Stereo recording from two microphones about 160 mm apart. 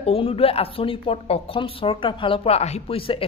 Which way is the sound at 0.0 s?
35° left (ahead or behind).